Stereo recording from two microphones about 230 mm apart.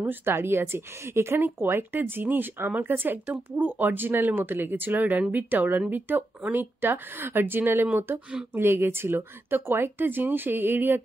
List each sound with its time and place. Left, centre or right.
0.0 s speech: centre